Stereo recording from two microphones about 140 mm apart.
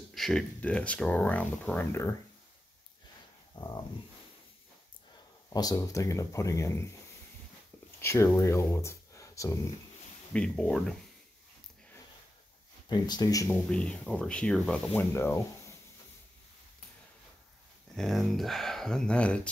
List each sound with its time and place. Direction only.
0.1 s speech: 5° left (ahead or behind); by 2.1 s 20° left (ahead or behind)
3.5 s speech: 30° left (ahead or behind)
5.5 s speech: 25° left (ahead or behind)
8.0 s speech: 20° left (ahead or behind)
10.3 s speech: 5° left (ahead or behind)
12.8 s speech: 30° left (ahead or behind)
13.7 s speech: 5° left (ahead or behind)
17.9 s speech: centre (ahead or behind)